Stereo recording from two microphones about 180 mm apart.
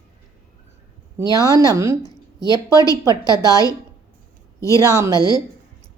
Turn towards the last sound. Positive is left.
turn(degrees=-15)  # may be behind; listen again after turning